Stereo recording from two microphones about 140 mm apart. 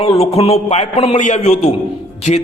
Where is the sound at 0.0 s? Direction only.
45° left (ahead or behind).